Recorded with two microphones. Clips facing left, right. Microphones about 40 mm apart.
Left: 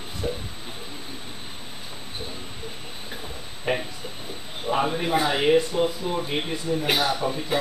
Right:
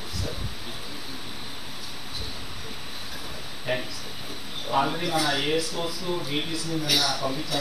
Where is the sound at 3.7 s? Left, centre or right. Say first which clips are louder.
Left 3 dB; left.